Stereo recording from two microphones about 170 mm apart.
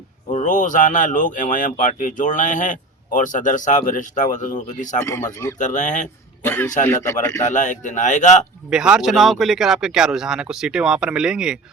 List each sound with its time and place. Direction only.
0.3 s speech: 50° left (ahead or behind)
4.9 s speech: 15° left (ahead or behind)
5.5 s speech: 45° left (ahead or behind)
6.4 s a man's voice: 15° left (ahead or behind)
7.4 s speech: 45° left (ahead or behind)
8.7 s speech: 5° right (ahead or behind)